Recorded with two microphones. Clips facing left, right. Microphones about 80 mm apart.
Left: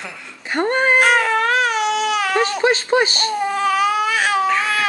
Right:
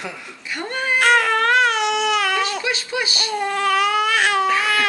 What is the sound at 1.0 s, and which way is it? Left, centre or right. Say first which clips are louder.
Baby cry: even; centre.